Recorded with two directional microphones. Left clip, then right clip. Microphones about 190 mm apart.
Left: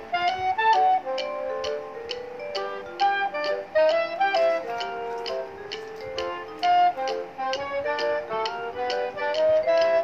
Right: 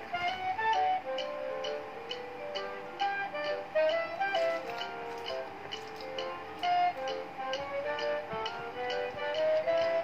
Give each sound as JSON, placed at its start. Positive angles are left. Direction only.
{"t": 0.2, "sound": "music", "side_deg": 45}
{"t": 2.5, "sound": "music", "side_deg": 45}
{"t": 6.2, "sound": "music", "side_deg": 45}